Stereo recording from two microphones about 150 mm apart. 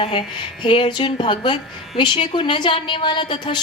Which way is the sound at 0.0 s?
35° left (ahead or behind).